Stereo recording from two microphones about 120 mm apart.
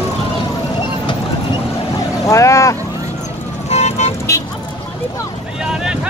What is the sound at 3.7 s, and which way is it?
Vehicle, 65° left (ahead or behind).